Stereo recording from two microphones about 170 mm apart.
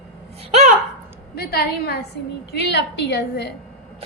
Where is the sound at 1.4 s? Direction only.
70° left (ahead or behind).